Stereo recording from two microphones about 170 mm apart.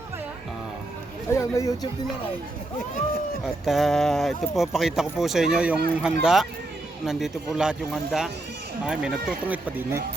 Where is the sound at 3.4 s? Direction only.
Centre (ahead or behind).